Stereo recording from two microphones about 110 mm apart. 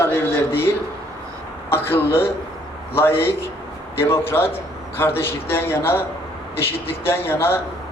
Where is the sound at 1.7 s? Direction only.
20° left (ahead or behind).